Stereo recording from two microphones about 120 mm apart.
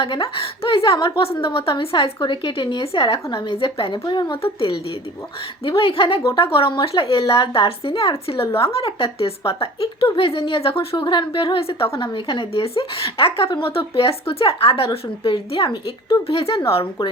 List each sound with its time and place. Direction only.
0.0 s a woman's voice: 45° left (ahead or behind)
5.6 s a woman's voice: 50° left (ahead or behind)